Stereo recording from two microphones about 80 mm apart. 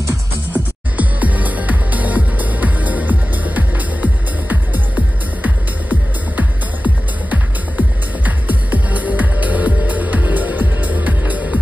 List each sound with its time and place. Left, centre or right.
0.5 s music: centre